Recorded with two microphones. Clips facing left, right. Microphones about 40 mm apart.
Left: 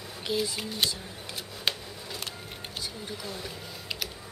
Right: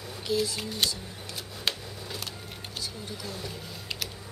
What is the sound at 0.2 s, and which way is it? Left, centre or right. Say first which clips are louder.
Speech: right 2 dB; centre.